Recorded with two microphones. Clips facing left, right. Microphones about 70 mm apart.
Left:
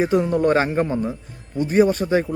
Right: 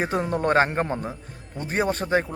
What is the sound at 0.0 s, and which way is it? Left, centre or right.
A man's voice, right.